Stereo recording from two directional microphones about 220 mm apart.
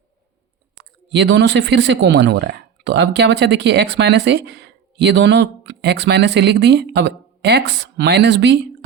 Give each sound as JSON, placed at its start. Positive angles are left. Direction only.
{"t": 1.1, "sound": "speech", "side_deg": -55}